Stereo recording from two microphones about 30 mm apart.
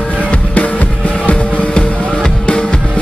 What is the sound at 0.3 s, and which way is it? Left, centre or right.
Music, left.